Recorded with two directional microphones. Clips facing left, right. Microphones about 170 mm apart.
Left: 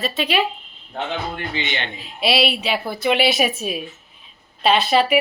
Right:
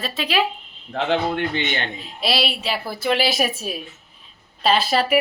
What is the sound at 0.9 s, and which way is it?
Speech, 75° right (ahead or behind).